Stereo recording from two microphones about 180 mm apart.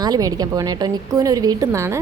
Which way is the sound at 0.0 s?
20° right (ahead or behind).